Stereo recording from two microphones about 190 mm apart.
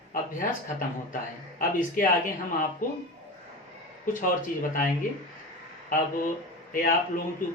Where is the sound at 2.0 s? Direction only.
50° left (ahead or behind).